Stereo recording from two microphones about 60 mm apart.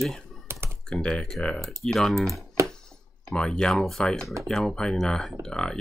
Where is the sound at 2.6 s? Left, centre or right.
Right.